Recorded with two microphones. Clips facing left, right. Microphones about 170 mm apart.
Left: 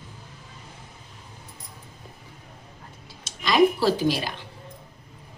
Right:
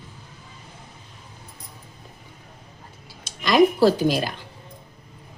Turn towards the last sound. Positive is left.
turn(degrees=-50)  # may be behind; listen again after turning